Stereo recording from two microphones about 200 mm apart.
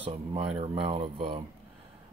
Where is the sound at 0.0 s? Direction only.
30° right (ahead or behind).